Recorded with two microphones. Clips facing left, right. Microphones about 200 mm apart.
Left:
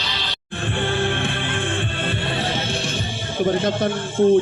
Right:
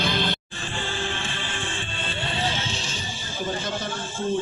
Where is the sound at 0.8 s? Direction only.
60° left (ahead or behind).